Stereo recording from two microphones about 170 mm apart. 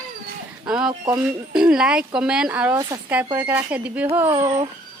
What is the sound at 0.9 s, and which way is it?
Speech, 25° right (ahead or behind).